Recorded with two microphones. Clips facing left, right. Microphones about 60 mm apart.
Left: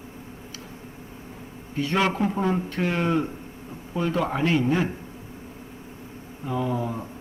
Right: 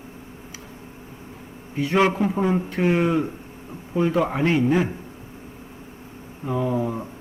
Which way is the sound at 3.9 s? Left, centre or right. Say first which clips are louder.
Right 4 dB; centre.